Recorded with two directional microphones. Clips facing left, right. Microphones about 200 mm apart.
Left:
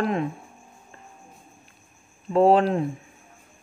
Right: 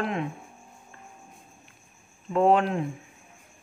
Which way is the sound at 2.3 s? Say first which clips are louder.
Left 4 dB; 35° left (ahead or behind).